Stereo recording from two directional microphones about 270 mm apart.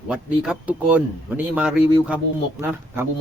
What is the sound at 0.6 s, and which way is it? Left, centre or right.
Speech, centre.